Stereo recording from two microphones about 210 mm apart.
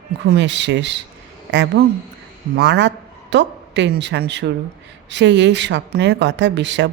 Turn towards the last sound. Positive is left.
turn(degrees=-55)  # may be behind; listen again after turning